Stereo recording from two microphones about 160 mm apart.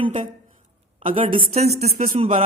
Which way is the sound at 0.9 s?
35° right (ahead or behind).